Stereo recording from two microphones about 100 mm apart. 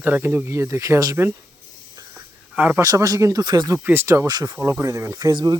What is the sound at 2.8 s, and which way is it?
Speech, 35° right (ahead or behind).